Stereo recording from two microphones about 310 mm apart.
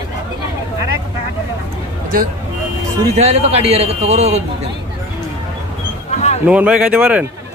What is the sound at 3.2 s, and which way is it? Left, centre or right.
Speech, centre.